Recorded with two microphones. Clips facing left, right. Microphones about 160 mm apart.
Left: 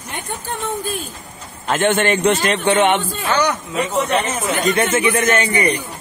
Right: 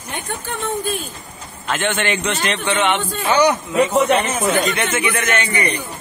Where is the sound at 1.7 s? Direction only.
45° left (ahead or behind).